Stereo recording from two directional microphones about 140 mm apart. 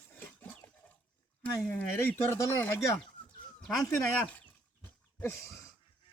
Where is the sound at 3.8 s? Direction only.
10° left (ahead or behind).